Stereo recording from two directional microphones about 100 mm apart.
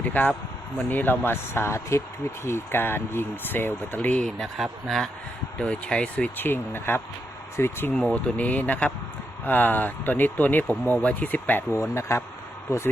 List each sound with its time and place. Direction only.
0.0 s speech: 15° left (ahead or behind)
4.4 s speech: centre (ahead or behind)
5.5 s speech: 10° left (ahead or behind); by 12.2 s 30° left (ahead or behind)